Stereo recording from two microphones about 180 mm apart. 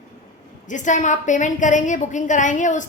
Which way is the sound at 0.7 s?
45° left (ahead or behind).